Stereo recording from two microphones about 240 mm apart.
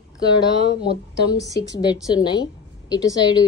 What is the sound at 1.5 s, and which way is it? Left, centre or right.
A woman's voice, centre.